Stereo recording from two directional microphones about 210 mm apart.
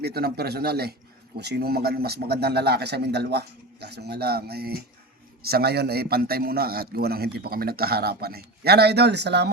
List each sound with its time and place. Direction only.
0.0 s a man's voice: 50° right (ahead or behind)